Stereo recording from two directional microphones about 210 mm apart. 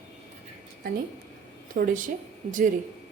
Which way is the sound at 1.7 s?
40° right (ahead or behind).